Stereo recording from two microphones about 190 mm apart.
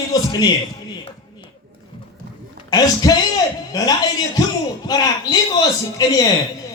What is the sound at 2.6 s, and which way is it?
A man's voice, 20° left (ahead or behind).